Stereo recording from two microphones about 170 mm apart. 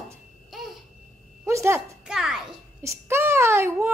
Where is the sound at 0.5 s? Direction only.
Centre (ahead or behind).